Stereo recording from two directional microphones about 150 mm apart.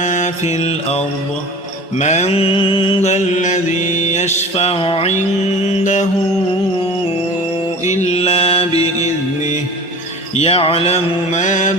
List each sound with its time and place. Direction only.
0.0 s mantra: 55° left (ahead or behind)
5.6 s mantra: 55° left (ahead or behind)
7.9 s mantra: 50° left (ahead or behind)
10.3 s mantra: 40° left (ahead or behind)